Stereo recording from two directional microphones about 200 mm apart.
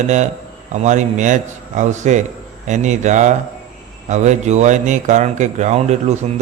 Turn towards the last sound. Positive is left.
turn(degrees=-35)  # may be behind; listen again after turning